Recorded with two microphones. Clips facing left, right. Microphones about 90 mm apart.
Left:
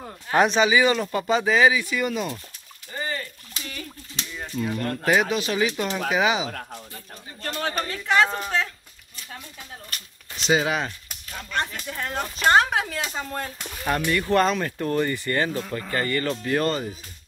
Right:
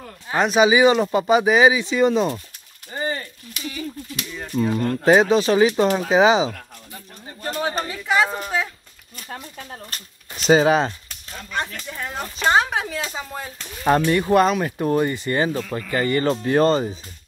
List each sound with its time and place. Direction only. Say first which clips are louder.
0.3 s speech: left 1 dB; 5° right (ahead or behind)
0.6 s speech: right 5 dB; 20° right (ahead or behind)
2.9 s a sound: right 4 dB; 25° right (ahead or behind)
4.6 s speech: right 6 dB; 25° right (ahead or behind)
7.8 s a woman's voice: left 1 dB; 5° right (ahead or behind)
9.1 s speech: right 6 dB; 45° right (ahead or behind)
11.3 s speech: even; centre (ahead or behind)
13.8 s speech: right 6 dB; 25° right (ahead or behind)
14.3 s a woman's voice: right 3 dB; 10° right (ahead or behind); by 16.9 s 30° right (ahead or behind)